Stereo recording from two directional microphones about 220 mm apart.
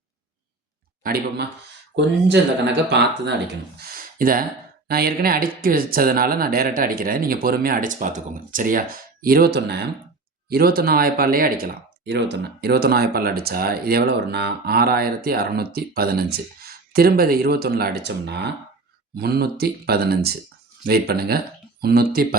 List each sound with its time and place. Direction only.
1.0 s speech: 45° right (ahead or behind)
3.8 s a sound: 45° right (ahead or behind)
4.9 s speech: 45° right (ahead or behind)